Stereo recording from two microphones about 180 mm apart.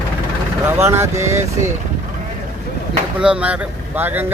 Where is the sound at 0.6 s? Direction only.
15° right (ahead or behind).